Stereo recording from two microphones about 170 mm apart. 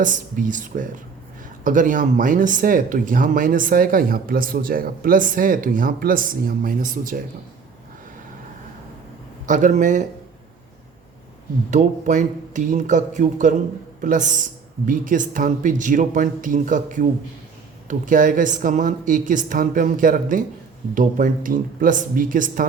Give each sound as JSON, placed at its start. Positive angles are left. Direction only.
{"t": 0.0, "sound": "speech", "side_deg": -50}
{"t": 9.5, "sound": "speech", "side_deg": -50}
{"t": 11.7, "sound": "speech", "side_deg": -45}